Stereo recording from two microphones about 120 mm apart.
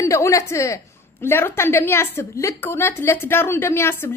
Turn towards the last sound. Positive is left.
turn(degrees=20)  # may be behind; listen again after turning